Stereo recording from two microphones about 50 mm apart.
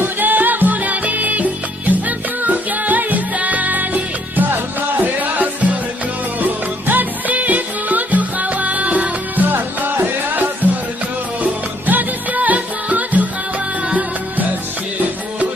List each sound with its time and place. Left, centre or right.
0.0 s music: right
9.5 s music: right